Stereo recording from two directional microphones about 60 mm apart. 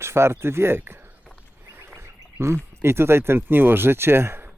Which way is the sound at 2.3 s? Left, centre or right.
Right.